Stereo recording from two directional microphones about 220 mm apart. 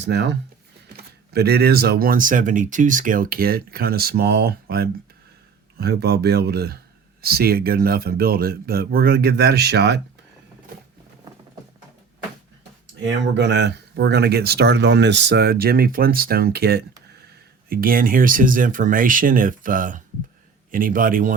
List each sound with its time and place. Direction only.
0.0 s speech: 50° right (ahead or behind)
13.0 s a man's voice: 50° right (ahead or behind)